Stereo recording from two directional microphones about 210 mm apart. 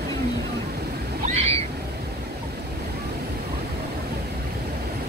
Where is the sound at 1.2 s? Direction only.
30° right (ahead or behind).